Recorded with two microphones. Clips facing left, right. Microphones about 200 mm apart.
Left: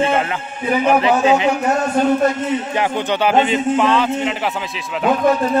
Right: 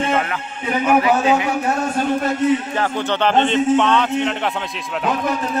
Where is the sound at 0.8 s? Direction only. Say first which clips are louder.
Left 1 dB; 25° left (ahead or behind).